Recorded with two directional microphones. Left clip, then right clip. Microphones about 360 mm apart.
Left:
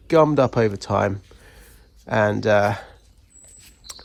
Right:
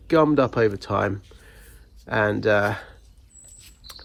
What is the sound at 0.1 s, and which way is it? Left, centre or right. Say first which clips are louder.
Speech: left 2 dB; left.